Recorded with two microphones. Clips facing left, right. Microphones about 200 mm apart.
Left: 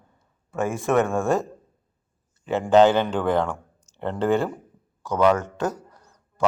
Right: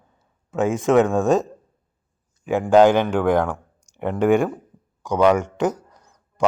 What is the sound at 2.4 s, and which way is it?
A man's voice, 10° right (ahead or behind).